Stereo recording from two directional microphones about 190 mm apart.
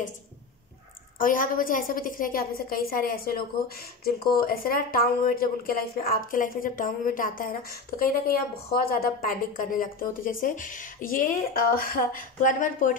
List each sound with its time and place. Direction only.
1.1 s a woman's voice: 45° left (ahead or behind)